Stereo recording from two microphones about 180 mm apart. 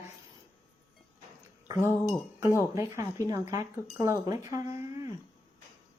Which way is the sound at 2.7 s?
15° right (ahead or behind).